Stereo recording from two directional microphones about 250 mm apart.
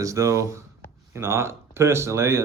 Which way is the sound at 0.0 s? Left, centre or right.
Centre.